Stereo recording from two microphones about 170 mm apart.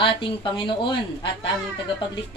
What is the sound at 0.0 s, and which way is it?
Speech, 30° left (ahead or behind).